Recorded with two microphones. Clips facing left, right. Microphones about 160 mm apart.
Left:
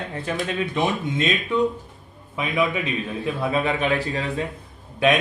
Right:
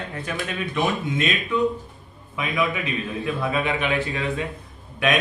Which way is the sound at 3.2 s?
30° left (ahead or behind).